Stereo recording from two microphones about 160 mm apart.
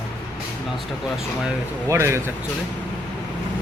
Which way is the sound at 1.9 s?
15° right (ahead or behind).